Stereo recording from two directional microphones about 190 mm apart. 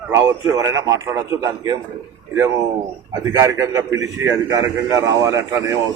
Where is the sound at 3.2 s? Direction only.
15° right (ahead or behind).